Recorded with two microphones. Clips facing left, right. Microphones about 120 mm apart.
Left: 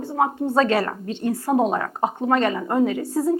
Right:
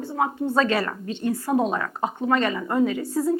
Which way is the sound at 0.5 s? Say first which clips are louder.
Left 3 dB; 45° left (ahead or behind).